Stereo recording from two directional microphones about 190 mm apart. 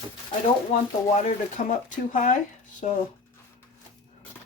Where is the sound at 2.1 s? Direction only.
40° left (ahead or behind).